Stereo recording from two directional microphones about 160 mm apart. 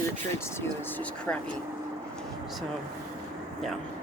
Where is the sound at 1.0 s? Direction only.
5° left (ahead or behind).